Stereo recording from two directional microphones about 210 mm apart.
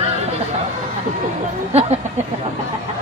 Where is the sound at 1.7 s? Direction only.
30° right (ahead or behind).